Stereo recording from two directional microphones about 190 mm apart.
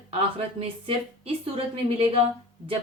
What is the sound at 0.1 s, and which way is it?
A woman's voice, 30° right (ahead or behind).